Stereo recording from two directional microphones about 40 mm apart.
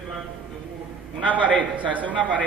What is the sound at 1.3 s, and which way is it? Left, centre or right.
Speech, left.